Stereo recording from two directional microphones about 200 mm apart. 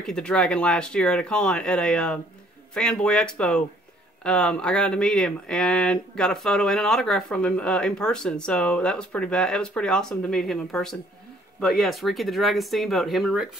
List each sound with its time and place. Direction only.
0.0 s speech: 5° left (ahead or behind)